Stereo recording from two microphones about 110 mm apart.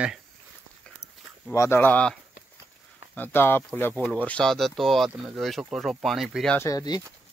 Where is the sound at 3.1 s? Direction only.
20° left (ahead or behind); by 6.5 s centre (ahead or behind).